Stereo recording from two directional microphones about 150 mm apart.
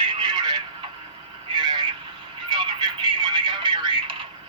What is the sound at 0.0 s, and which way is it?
Telephone, 30° right (ahead or behind).